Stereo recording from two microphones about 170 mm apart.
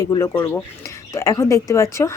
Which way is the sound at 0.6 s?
20° left (ahead or behind).